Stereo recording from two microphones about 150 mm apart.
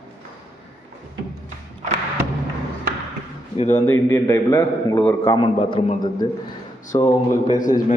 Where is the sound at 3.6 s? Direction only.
50° left (ahead or behind).